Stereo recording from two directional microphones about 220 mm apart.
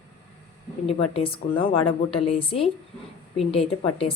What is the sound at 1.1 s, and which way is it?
A woman's voice, 25° left (ahead or behind).